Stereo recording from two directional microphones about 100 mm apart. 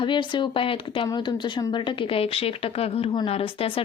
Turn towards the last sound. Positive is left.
turn(degrees=70)  # may be behind; listen again after turning